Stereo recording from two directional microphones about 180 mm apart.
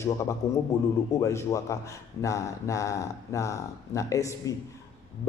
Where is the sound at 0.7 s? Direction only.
15° left (ahead or behind).